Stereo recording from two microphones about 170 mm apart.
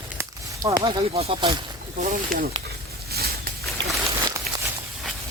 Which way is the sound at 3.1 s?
65° right (ahead or behind).